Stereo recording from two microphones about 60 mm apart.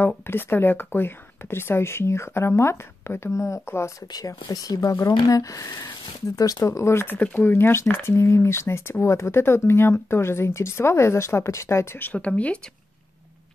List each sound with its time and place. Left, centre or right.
0.3 s speech: left
4.1 s speech: left
6.3 s speech: left
6.6 s speech: left
7.3 s speech: left
12.0 s speech: left